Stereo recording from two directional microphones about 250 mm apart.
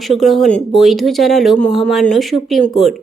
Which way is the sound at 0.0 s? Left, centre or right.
Centre.